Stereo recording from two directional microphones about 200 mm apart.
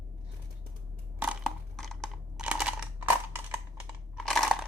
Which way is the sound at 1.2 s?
5° right (ahead or behind).